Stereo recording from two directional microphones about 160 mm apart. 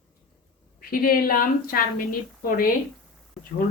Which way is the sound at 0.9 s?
65° left (ahead or behind).